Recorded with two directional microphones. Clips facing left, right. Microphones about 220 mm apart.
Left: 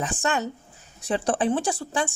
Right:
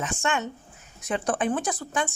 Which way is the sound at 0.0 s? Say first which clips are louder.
Left 2 dB; 35° left (ahead or behind).